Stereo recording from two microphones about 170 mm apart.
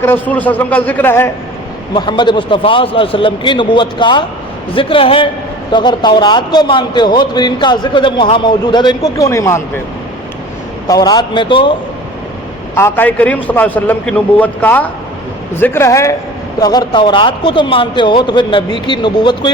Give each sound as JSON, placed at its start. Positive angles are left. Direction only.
{"t": 0.0, "sound": "a man's voice", "side_deg": 10}
{"t": 1.9, "sound": "a man's voice", "side_deg": 25}
{"t": 10.8, "sound": "a man's voice", "side_deg": 20}
{"t": 12.7, "sound": "a man's voice", "side_deg": 15}